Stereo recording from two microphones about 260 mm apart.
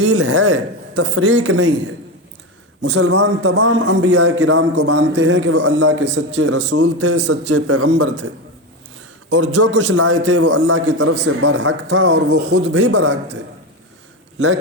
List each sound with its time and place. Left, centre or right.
0.0 s a man's voice: right
7.5 s speech: right
7.9 s a man's voice: right
9.6 s a man's voice: right